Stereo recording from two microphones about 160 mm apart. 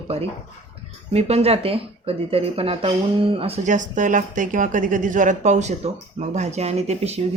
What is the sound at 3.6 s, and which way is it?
A woman's voice, 50° right (ahead or behind).